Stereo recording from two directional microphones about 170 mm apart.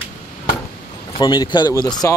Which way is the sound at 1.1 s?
25° left (ahead or behind).